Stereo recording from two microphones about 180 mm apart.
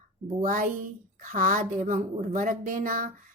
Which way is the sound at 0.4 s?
50° right (ahead or behind).